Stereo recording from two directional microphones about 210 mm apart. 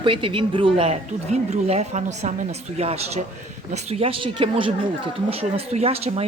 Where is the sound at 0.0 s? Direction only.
25° right (ahead or behind).